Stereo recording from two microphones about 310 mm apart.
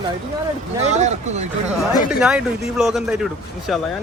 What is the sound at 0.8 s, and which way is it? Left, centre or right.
Speech, right.